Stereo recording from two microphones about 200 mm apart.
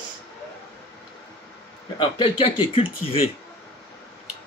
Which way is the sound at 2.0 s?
25° left (ahead or behind).